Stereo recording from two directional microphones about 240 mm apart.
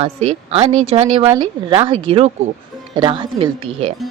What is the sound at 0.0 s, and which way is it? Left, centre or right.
Speech, right.